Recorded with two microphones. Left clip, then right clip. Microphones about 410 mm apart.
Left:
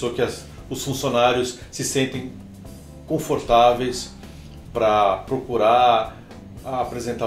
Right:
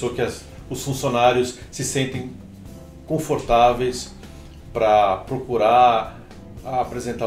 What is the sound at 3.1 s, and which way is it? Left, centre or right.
Speech, right.